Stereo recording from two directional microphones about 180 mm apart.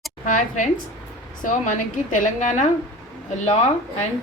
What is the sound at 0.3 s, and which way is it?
A woman's voice, 45° left (ahead or behind).